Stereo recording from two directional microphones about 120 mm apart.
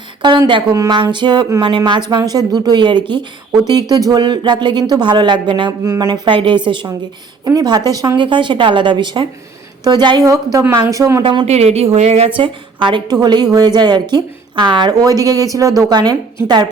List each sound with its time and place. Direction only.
0.2 s a woman's voice: 40° right (ahead or behind)
0.7 s speech: 25° right (ahead or behind)
1.1 s a woman's voice: 40° right (ahead or behind)
5.8 s speech: 25° right (ahead or behind)
6.1 s a woman's voice: 45° right (ahead or behind)
7.4 s a woman's voice: 35° right (ahead or behind)
11.2 s a woman's voice: 40° right (ahead or behind)
11.4 s a woman's voice: 60° right (ahead or behind); by 16.6 s 35° right (ahead or behind)